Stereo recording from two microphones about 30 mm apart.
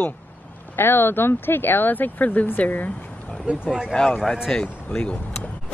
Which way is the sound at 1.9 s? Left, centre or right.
Left.